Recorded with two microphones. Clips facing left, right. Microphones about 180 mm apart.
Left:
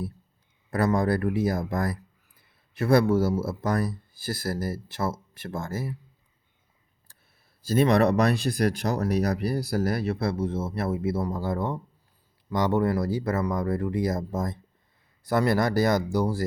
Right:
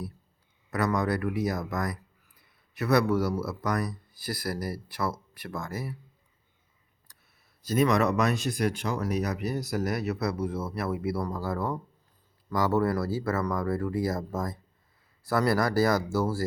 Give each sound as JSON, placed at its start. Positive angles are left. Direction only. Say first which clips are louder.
{"t": 0.7, "sound": "speech", "louder": "left 4 dB", "side_deg": 30}
{"t": 7.7, "sound": "speech", "louder": "left 3 dB", "side_deg": 30}